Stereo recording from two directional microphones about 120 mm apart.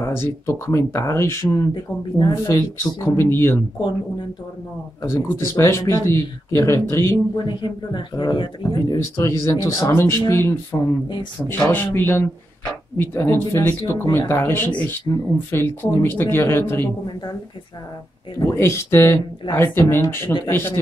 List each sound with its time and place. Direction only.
0.0 s speech: 25° left (ahead or behind)
1.7 s speech: 40° left (ahead or behind)
2.3 s speech: 25° left (ahead or behind)
5.0 s speech: 25° left (ahead or behind)
7.4 s speech: 40° left (ahead or behind)
8.7 s speech: 25° left (ahead or behind)
18.4 s speech: 25° left (ahead or behind)